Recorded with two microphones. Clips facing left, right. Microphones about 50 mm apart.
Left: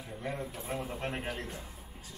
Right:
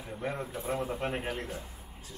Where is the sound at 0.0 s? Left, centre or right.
Centre.